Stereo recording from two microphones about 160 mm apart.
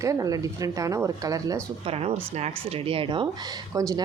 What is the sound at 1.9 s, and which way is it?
Speech, 40° right (ahead or behind).